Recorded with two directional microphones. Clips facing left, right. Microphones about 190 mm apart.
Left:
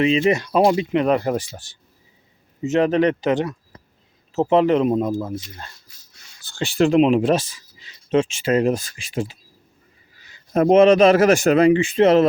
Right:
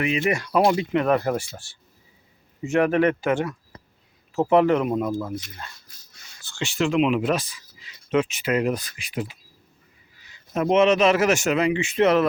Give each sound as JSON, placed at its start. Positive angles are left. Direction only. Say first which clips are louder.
{"t": 0.0, "sound": "speech", "louder": "left 6 dB", "side_deg": 25}
{"t": 2.6, "sound": "speech", "louder": "left 2 dB", "side_deg": 20}
{"t": 6.5, "sound": "speech", "louder": "left 6 dB", "side_deg": 35}
{"t": 10.5, "sound": "a man's voice", "louder": "left 6 dB", "side_deg": 35}